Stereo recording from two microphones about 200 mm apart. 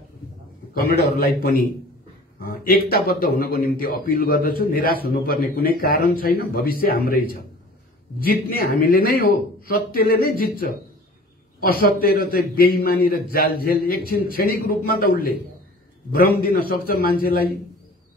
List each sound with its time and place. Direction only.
0.7 s speech: 50° left (ahead or behind)